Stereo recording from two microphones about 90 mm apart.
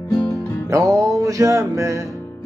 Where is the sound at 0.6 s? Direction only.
40° right (ahead or behind).